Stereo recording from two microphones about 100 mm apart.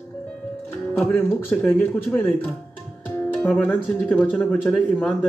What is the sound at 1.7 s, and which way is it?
Speech, 20° left (ahead or behind).